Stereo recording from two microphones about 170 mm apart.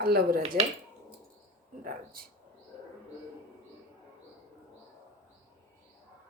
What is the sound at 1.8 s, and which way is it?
Speech, 60° right (ahead or behind).